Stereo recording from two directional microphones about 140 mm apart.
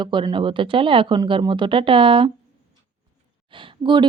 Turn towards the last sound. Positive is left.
turn(degrees=-35)  # may be behind; listen again after turning